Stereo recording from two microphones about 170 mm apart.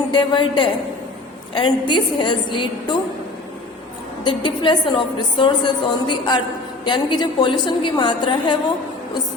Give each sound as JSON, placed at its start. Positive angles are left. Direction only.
{"t": 0.1, "sound": "a woman's voice", "side_deg": 30}
{"t": 4.2, "sound": "a woman's voice", "side_deg": 30}